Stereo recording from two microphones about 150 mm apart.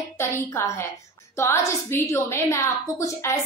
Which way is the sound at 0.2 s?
20° left (ahead or behind).